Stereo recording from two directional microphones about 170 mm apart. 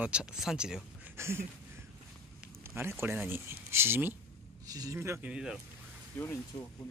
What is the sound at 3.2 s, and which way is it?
Speech, 15° right (ahead or behind).